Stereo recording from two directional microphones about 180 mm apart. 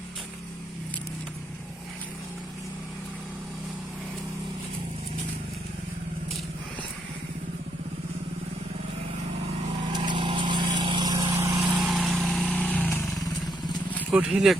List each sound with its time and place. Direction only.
9.9 s vehicle: 25° right (ahead or behind); by 13.0 s 10° left (ahead or behind)
14.1 s speech: 5° right (ahead or behind)